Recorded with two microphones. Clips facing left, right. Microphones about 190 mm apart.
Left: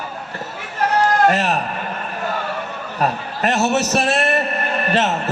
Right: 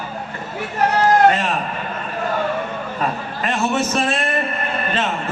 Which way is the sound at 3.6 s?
80° left.